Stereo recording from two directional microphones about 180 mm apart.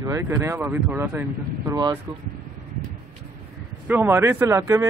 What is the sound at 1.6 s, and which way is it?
Speech, 20° right (ahead or behind).